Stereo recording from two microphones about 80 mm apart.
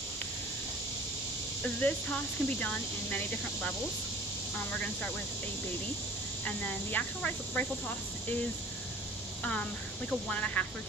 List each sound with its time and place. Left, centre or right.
1.6 s speech: centre
4.7 s speech: centre
6.4 s speech: centre
9.4 s speech: centre